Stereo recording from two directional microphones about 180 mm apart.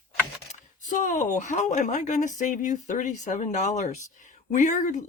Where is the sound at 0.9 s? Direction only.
45° left (ahead or behind).